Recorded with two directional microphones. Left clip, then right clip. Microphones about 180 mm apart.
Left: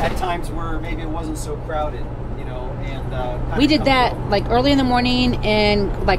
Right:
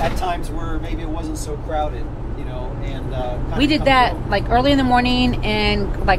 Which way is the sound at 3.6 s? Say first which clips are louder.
Right 1 dB; 40° left (ahead or behind).